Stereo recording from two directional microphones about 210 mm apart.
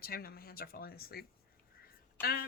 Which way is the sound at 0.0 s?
45° left (ahead or behind).